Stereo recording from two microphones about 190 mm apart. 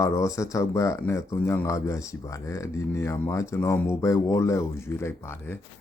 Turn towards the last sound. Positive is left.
turn(degrees=15)  # may be behind; listen again after turning